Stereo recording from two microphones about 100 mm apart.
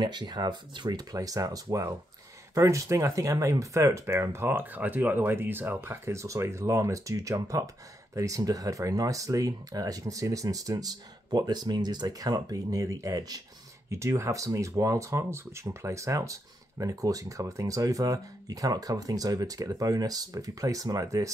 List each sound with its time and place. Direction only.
0.0 s speech: 45° right (ahead or behind)